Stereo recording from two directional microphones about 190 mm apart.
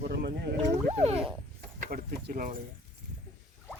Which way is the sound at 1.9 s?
55° right (ahead or behind).